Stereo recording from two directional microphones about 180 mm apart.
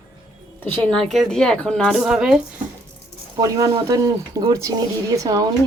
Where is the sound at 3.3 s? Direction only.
20° right (ahead or behind).